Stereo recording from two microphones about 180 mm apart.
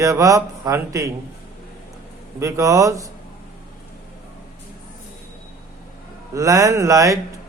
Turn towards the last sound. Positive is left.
turn(degrees=-15)  # may be behind; listen again after turning